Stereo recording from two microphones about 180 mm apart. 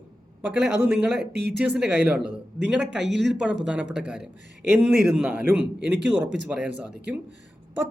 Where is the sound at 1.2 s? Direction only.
65° right (ahead or behind).